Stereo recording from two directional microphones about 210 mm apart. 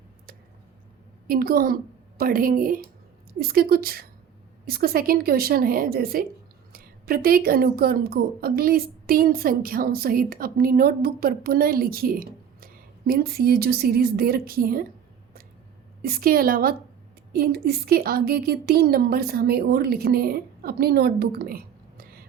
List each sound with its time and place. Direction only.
1.3 s a woman's voice: 45° right (ahead or behind)
16.0 s a woman's voice: 45° right (ahead or behind)